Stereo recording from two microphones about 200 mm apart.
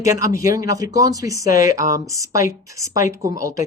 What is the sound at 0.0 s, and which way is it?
Speech, 15° right (ahead or behind).